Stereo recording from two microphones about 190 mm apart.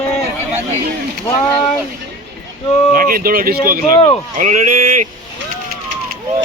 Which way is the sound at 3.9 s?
25° left (ahead or behind).